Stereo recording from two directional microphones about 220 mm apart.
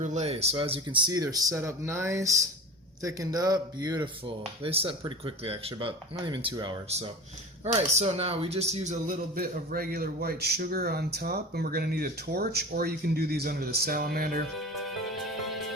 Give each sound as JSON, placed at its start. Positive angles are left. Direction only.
{"t": 0.0, "sound": "speech", "side_deg": -30}
{"t": 14.6, "sound": "music", "side_deg": 0}